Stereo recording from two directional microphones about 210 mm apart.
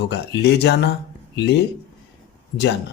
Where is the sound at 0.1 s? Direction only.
55° left (ahead or behind).